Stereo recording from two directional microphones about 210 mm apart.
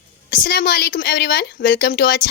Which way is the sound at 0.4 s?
45° left (ahead or behind).